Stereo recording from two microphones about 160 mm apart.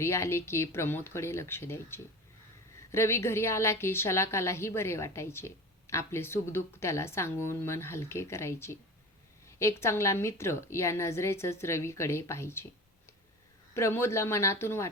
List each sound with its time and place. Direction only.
0.0 s a woman's voice: 15° left (ahead or behind)
13.7 s a woman's voice: 15° left (ahead or behind)